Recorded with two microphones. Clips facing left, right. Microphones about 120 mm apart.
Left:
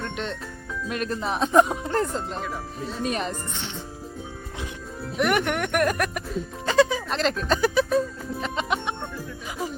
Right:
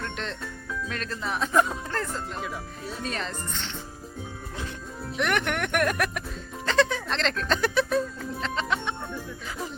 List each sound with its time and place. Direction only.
0.0 s jingle bell: 5° left (ahead or behind)
0.9 s speech: 15° left (ahead or behind)
5.1 s speech: 5° left (ahead or behind)
8.4 s music: 15° left (ahead or behind)